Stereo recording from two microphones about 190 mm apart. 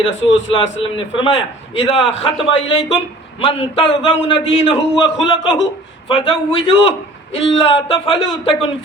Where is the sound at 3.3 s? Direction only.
30° left (ahead or behind).